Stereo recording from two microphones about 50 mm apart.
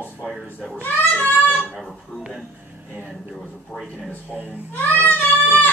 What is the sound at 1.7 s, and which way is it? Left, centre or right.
Speech, centre.